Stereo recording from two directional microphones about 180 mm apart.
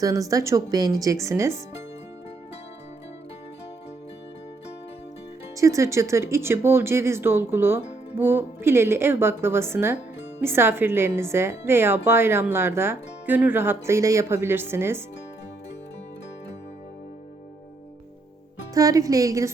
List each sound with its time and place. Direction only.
0.0 s speech: 20° right (ahead or behind)
5.5 s speech: 15° right (ahead or behind)
18.7 s speech: 20° right (ahead or behind)